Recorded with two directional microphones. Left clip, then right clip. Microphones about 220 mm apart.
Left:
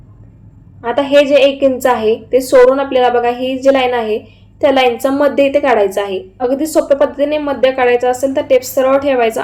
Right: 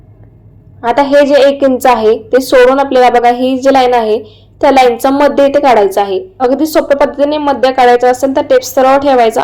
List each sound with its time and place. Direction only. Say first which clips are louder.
0.8 s a woman's voice: right 3 dB; 20° right (ahead or behind)